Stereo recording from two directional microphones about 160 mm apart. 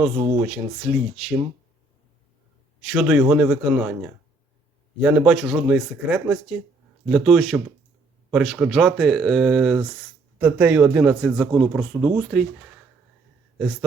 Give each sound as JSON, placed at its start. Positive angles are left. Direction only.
{"t": 0.4, "sound": "a man's voice", "side_deg": 0}
{"t": 2.8, "sound": "a man's voice", "side_deg": -5}